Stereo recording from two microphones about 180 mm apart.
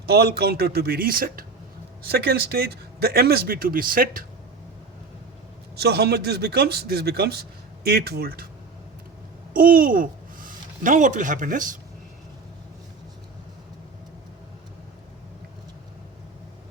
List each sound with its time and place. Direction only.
0.0 s speech: 60° right (ahead or behind)
5.7 s speech: 60° right (ahead or behind)
9.5 s speech: 50° right (ahead or behind)